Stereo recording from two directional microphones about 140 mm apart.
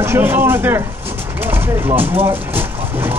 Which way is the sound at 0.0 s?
15° right (ahead or behind).